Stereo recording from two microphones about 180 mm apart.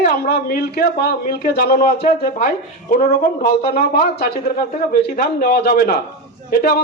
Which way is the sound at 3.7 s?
65° left (ahead or behind).